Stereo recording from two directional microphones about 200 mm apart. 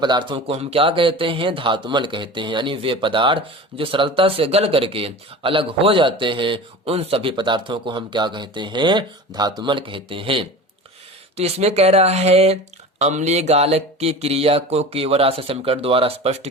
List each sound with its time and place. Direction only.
0.0 s speech: 20° right (ahead or behind)
11.3 s mantra: 30° right (ahead or behind)